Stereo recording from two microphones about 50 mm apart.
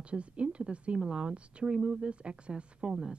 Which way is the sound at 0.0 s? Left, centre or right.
Right.